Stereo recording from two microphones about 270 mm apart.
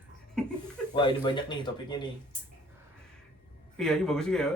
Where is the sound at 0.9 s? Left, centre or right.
Centre.